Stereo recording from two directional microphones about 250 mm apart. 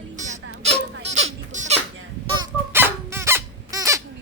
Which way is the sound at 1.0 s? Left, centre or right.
Right.